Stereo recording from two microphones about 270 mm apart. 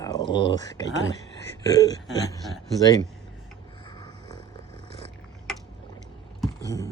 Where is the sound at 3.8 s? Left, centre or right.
Centre.